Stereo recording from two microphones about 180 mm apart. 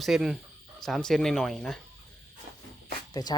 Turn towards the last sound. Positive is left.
turn(degrees=20)  # may be behind; listen again after turning